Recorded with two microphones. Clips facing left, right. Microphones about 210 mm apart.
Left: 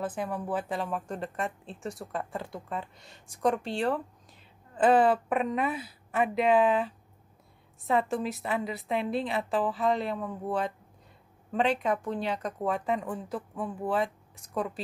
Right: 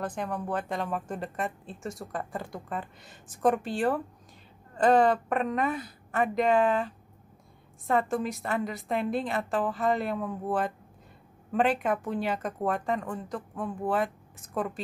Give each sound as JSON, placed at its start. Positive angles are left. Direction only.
{"t": 0.0, "sound": "speech", "side_deg": 5}